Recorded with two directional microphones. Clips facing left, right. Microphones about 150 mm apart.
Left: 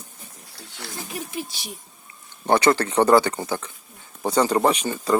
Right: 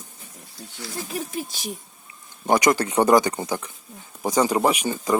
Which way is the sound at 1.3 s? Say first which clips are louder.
Right 2 dB; 45° right (ahead or behind).